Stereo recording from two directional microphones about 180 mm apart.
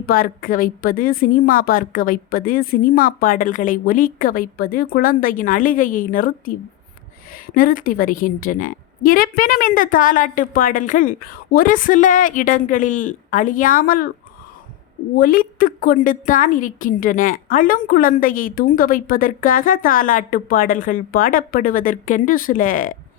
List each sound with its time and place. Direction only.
0.0 s a woman's voice: 55° left (ahead or behind)
15.2 s a woman's voice: 55° left (ahead or behind)